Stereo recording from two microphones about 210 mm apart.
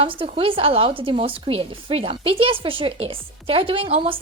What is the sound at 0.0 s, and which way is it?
Speech, 25° right (ahead or behind).